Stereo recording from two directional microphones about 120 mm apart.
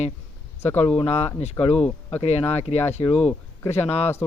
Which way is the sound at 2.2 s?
60° left (ahead or behind).